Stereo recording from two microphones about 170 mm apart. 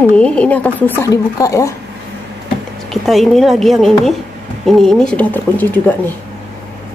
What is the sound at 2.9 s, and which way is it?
A woman's voice, centre (ahead or behind).